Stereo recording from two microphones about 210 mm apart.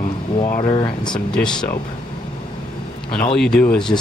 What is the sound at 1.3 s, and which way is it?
Speech, 5° left (ahead or behind).